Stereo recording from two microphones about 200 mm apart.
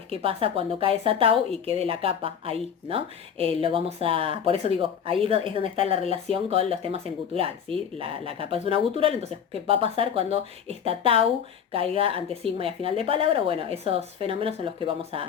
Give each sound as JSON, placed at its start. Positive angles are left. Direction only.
{"t": 0.1, "sound": "a woman's voice", "side_deg": -30}